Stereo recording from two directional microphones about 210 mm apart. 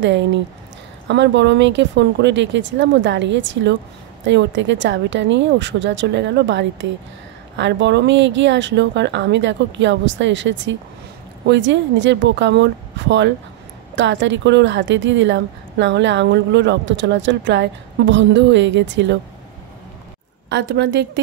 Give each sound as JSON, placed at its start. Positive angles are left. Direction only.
{"t": 0.0, "sound": "speech", "side_deg": -60}
{"t": 20.4, "sound": "speech", "side_deg": -55}